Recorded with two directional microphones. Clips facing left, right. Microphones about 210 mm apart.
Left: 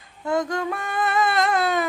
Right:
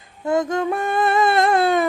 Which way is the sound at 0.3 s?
20° right (ahead or behind).